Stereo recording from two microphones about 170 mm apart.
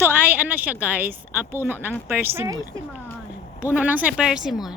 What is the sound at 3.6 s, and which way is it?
Speech, 10° right (ahead or behind).